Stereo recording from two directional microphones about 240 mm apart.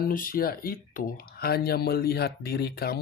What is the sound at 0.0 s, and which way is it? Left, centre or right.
Speech, left.